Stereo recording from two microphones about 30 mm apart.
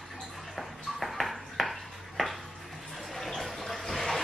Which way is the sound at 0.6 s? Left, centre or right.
Centre.